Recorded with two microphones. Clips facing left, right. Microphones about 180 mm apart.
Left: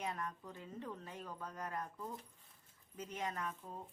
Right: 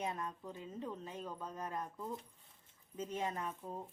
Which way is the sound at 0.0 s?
20° right (ahead or behind).